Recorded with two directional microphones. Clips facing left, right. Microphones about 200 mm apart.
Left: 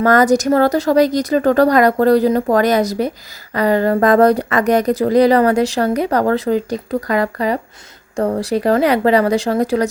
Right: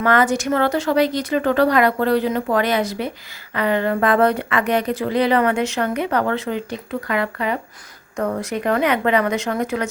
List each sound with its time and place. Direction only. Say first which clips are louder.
0.0 s speech: left 6 dB; 40° left (ahead or behind)